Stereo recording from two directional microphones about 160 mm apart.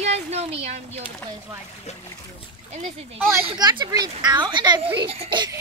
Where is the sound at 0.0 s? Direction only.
40° right (ahead or behind).